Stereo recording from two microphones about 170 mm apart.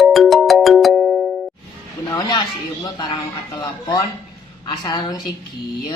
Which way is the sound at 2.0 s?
25° left (ahead or behind).